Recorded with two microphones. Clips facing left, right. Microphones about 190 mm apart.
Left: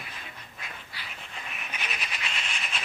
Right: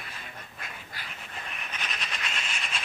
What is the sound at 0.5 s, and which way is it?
Duck, 45° right (ahead or behind).